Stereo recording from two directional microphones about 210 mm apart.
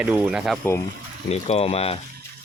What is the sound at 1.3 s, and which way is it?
Speech, 30° left (ahead or behind).